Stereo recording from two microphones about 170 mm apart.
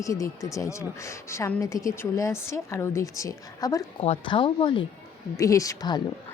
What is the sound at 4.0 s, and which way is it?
Speech, 35° left (ahead or behind).